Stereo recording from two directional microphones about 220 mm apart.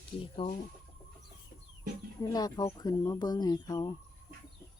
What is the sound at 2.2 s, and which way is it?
Crowing, 15° left (ahead or behind).